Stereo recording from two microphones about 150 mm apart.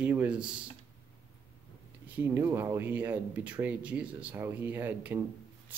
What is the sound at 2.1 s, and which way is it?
Speech, 15° right (ahead or behind).